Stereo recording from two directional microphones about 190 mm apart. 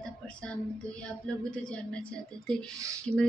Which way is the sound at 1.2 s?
5° left (ahead or behind).